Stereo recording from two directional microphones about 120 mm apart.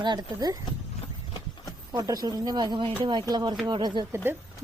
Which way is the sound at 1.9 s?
30° right (ahead or behind).